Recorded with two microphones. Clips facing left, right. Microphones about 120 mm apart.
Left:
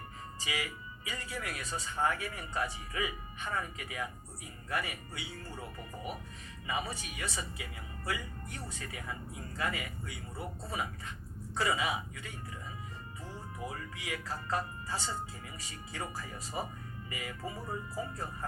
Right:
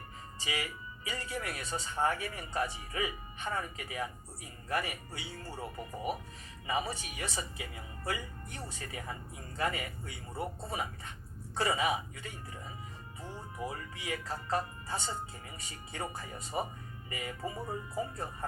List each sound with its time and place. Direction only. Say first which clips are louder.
0.4 s speech: right 1 dB; 35° right (ahead or behind)
11.5 s speech: right 2 dB; 30° right (ahead or behind)